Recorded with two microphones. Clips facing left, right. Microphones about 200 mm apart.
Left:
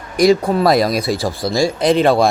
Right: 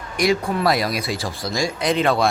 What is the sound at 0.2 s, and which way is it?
A man's voice, 40° left (ahead or behind).